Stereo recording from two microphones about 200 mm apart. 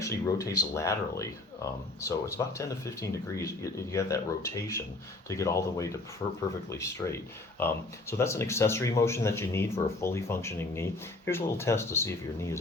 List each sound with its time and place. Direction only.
0.0 s speech: 15° left (ahead or behind)
8.2 s speech: 15° left (ahead or behind)